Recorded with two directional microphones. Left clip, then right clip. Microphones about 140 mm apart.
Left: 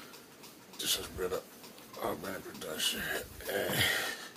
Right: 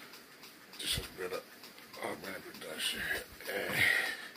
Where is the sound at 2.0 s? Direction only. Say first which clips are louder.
Left 4 dB; 15° left (ahead or behind).